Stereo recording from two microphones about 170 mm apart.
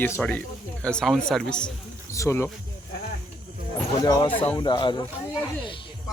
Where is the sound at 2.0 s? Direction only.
15° left (ahead or behind).